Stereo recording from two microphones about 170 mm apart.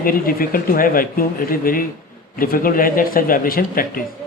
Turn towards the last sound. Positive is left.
turn(degrees=60)  # may be behind; listen again after turning